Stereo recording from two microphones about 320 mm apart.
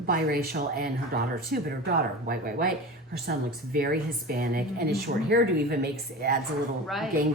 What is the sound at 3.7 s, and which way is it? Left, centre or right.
A woman's voice, right.